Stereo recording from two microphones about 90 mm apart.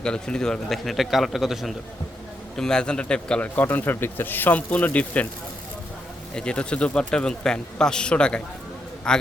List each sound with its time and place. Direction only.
0.0 s a man's voice: 10° left (ahead or behind)
6.3 s speech: 10° left (ahead or behind)